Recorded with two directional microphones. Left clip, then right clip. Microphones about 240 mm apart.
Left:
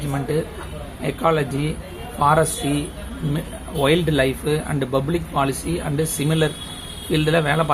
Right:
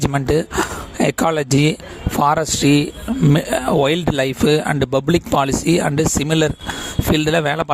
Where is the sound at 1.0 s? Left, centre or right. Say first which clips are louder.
Right 2 dB; right.